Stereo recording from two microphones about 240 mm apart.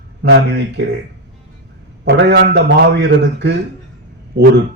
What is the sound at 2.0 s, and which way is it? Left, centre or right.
A man's voice, right.